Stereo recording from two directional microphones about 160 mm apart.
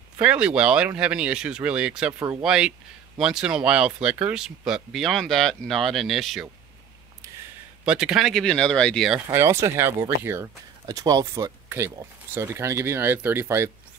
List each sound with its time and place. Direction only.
0.2 s speech: 5° right (ahead or behind)
7.8 s speech: 5° right (ahead or behind)
9.3 s speech: 15° right (ahead or behind)